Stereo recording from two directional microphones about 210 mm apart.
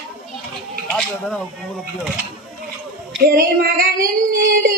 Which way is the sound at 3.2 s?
45° right (ahead or behind).